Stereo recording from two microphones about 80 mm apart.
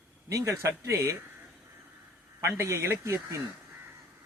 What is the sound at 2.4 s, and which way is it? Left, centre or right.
Speech, right.